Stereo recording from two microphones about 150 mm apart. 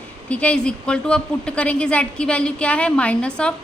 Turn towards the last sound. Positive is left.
turn(degrees=10)  # may be behind; listen again after turning